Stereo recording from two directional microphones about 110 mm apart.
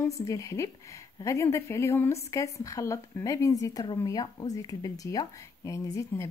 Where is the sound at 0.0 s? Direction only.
30° left (ahead or behind).